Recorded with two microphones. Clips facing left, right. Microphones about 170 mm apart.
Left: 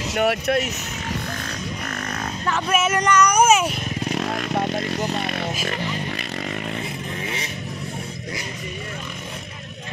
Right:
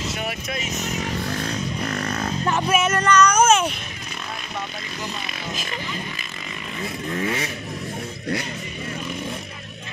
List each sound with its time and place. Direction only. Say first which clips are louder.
0.1 s speech: left 9 dB; 65° left (ahead or behind)
1.9 s a sound: right 3 dB; 35° right (ahead or behind)
2.7 s music: left 1 dB; 5° left (ahead or behind)
3.0 s a sound: even; 15° left (ahead or behind)
4.1 s speech: left 9 dB; 70° left (ahead or behind)
7.2 s vehicle: right 8 dB; 55° right (ahead or behind)